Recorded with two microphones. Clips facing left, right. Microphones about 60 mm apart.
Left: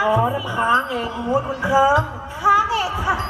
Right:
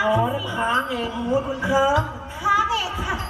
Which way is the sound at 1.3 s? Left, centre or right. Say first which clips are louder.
Left 3 dB; left.